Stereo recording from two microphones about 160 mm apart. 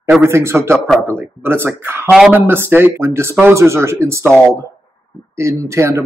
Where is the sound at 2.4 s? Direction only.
15° right (ahead or behind).